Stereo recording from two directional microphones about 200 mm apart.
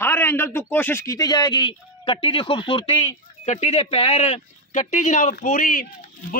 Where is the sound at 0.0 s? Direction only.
10° left (ahead or behind).